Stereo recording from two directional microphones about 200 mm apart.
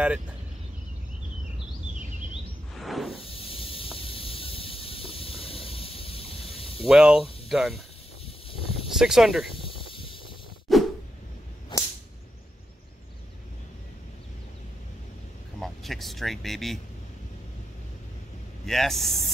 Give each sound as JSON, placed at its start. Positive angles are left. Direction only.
{"t": 2.7, "sound": "whoosh", "side_deg": 0}
{"t": 3.2, "sound": "snake", "side_deg": 30}
{"t": 6.9, "sound": "speech", "side_deg": -5}
{"t": 8.5, "sound": "a sound", "side_deg": 30}
{"t": 8.8, "sound": "speech", "side_deg": 0}
{"t": 9.5, "sound": "snake", "side_deg": 25}
{"t": 10.7, "sound": "a sound", "side_deg": 0}
{"t": 11.7, "sound": "whip", "side_deg": 20}
{"t": 15.6, "sound": "speech", "side_deg": 0}
{"t": 18.7, "sound": "speech", "side_deg": 0}